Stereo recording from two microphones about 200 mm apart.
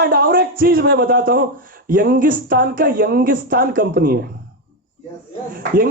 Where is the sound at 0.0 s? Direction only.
50° right (ahead or behind).